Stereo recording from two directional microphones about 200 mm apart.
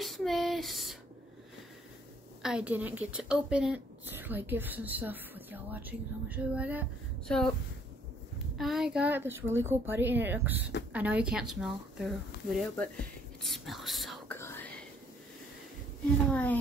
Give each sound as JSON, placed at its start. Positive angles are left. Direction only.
{"t": 0.0, "sound": "a sound", "side_deg": 0}
{"t": 2.4, "sound": "a woman's voice", "side_deg": -5}
{"t": 7.2, "sound": "speech", "side_deg": 5}
{"t": 8.5, "sound": "a woman's voice", "side_deg": 0}
{"t": 14.3, "sound": "whispering", "side_deg": 10}
{"t": 16.3, "sound": "a woman's voice", "side_deg": 5}